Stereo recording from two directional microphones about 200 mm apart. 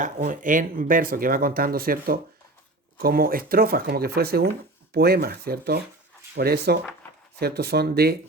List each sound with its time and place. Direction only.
0.0 s speech: 40° right (ahead or behind)